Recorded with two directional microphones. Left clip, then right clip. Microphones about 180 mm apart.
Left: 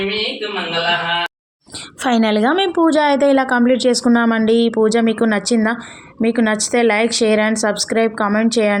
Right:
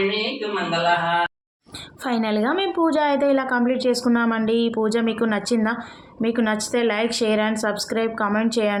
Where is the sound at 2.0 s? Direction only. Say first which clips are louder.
Left 7 dB; 45° left (ahead or behind).